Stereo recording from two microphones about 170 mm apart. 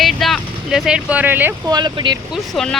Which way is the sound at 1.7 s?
25° right (ahead or behind).